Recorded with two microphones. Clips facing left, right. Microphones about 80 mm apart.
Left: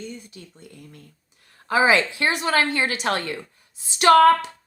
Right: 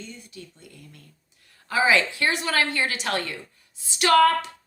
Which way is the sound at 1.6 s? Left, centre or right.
Left.